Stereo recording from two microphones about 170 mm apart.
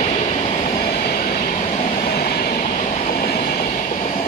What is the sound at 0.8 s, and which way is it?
Train, 60° left (ahead or behind).